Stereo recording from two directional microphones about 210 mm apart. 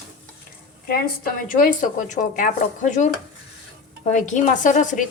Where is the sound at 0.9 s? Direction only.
45° left (ahead or behind).